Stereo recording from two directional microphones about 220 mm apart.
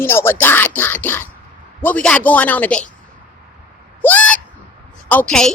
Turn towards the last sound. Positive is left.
turn(degrees=5)  # may be behind; listen again after turning